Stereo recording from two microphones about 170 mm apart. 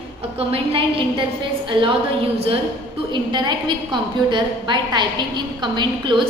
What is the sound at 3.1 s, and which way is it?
A woman's voice, 25° right (ahead or behind).